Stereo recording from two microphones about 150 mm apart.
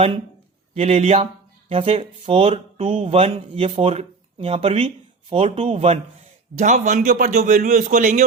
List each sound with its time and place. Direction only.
0.7 s speech: 40° right (ahead or behind)
6.6 s a man's voice: 55° right (ahead or behind)